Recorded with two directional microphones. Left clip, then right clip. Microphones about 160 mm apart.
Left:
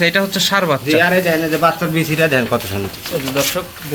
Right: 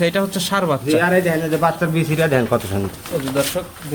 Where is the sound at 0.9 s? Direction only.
60° right (ahead or behind).